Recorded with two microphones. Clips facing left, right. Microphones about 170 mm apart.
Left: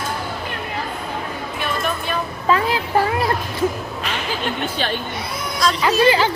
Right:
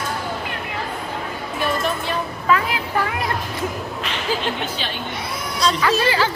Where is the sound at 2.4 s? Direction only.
30° left (ahead or behind).